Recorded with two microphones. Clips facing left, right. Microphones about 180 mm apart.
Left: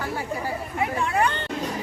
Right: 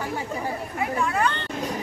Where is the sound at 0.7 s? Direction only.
20° left (ahead or behind).